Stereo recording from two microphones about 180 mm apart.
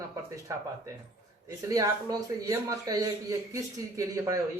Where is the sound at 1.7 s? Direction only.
20° right (ahead or behind).